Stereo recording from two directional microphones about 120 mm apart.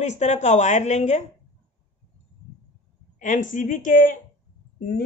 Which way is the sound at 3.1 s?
90° left.